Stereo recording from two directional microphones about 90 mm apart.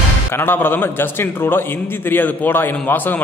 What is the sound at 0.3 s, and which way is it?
A man's voice, 25° left (ahead or behind).